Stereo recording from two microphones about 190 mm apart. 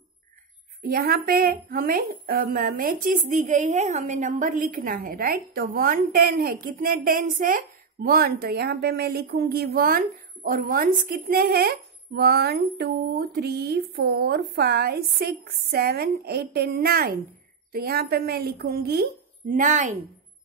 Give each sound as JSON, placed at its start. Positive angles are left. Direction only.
{"t": 0.8, "sound": "a woman's voice", "side_deg": -50}